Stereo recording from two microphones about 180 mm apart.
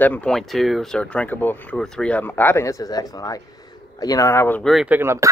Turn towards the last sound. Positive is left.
turn(degrees=-15)  # may be behind; listen again after turning